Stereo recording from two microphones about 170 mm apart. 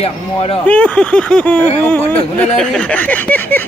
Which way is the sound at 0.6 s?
10° left (ahead or behind).